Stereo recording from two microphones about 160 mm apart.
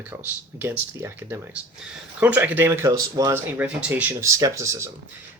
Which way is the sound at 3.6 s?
10° right (ahead or behind).